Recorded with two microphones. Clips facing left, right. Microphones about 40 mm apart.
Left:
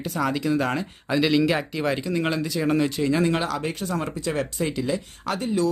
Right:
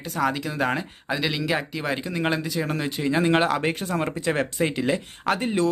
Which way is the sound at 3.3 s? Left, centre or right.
Right.